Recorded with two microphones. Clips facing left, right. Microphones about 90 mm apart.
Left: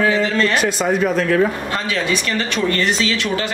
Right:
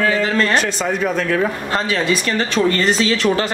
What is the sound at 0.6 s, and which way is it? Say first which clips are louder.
Speech: left 2 dB; 5° left (ahead or behind).